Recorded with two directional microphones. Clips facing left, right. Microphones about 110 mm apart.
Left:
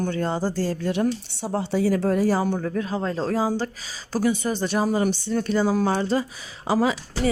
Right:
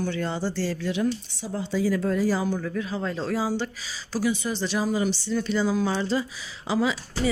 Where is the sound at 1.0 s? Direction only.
65° left (ahead or behind).